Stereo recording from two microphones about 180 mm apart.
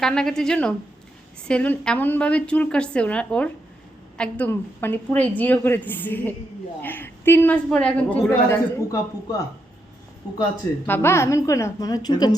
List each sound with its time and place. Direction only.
0.0 s a woman's voice: 5° left (ahead or behind)
10.8 s a woman's voice: 10° left (ahead or behind)